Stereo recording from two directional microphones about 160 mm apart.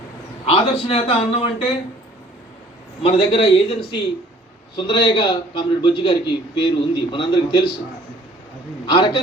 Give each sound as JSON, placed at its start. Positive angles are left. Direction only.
{"t": 0.4, "sound": "a man's voice", "side_deg": 40}
{"t": 3.0, "sound": "a man's voice", "side_deg": 35}
{"t": 8.9, "sound": "a man's voice", "side_deg": 30}